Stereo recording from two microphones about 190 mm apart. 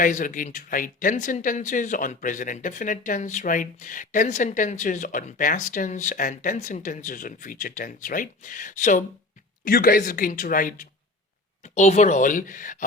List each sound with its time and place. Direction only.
0.0 s speech: 45° left (ahead or behind)